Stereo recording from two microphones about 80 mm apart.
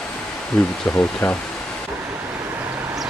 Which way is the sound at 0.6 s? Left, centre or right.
Centre.